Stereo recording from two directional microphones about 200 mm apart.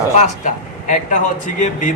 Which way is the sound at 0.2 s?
40° left (ahead or behind).